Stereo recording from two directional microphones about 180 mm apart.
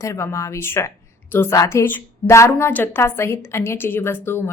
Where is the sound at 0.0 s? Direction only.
15° left (ahead or behind).